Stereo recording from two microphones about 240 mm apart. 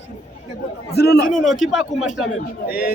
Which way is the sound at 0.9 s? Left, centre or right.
Left.